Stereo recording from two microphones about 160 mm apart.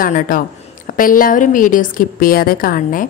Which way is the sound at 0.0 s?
60° left (ahead or behind).